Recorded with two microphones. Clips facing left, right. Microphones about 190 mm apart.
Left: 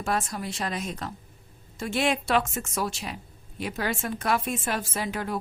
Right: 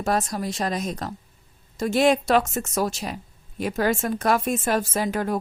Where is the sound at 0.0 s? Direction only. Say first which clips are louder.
Right 5 dB; 40° right (ahead or behind).